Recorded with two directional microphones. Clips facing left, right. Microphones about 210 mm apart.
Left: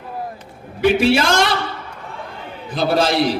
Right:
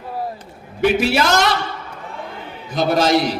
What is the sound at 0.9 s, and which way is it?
Speech, 30° left (ahead or behind).